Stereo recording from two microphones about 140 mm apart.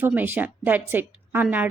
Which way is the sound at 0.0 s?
10° right (ahead or behind).